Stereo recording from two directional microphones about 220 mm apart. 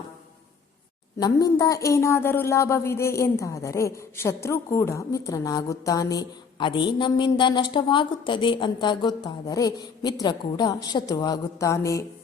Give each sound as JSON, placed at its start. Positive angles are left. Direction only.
{"t": 1.2, "sound": "a woman's voice", "side_deg": 15}